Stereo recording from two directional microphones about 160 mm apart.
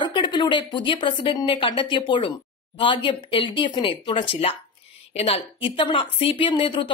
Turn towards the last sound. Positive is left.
turn(degrees=30)  # may be behind; listen again after turning